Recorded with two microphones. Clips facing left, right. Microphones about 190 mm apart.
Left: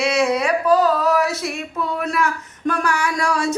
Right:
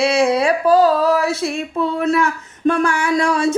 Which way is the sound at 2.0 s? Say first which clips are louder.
Right 6 dB; 25° right (ahead or behind).